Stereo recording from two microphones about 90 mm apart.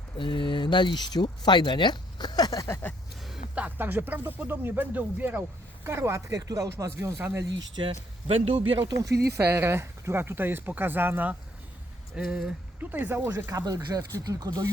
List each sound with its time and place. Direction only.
0.2 s speech: 65° left (ahead or behind); by 2.6 s 45° left (ahead or behind)
2.6 s a sound: 25° left (ahead or behind)
3.5 s speech: 15° right (ahead or behind)
5.8 s speech: 30° right (ahead or behind)
7.8 s speech: 90° right
9.5 s speech: 25° right (ahead or behind)
12.2 s speech: 5° right (ahead or behind)
12.8 s speech: 20° right (ahead or behind)
13.5 s speech: 40° right (ahead or behind)